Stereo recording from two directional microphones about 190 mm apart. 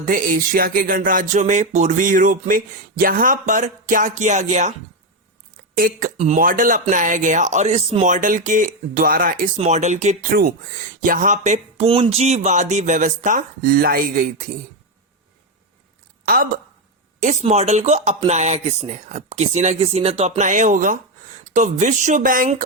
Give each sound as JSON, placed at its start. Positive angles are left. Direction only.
{"t": 0.0, "sound": "speech", "side_deg": -45}
{"t": 5.7, "sound": "speech", "side_deg": -50}
{"t": 9.6, "sound": "speech", "side_deg": -35}
{"t": 16.2, "sound": "a woman's voice", "side_deg": -50}
{"t": 17.2, "sound": "speech", "side_deg": -40}